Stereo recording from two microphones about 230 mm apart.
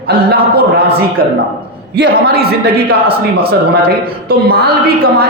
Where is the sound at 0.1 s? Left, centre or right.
Right.